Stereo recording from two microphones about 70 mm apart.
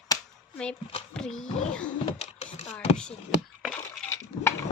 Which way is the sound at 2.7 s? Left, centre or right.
Centre.